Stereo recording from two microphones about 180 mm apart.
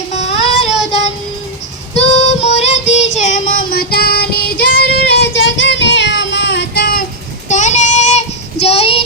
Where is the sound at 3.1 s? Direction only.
45° left (ahead or behind); by 4.5 s 60° left (ahead or behind).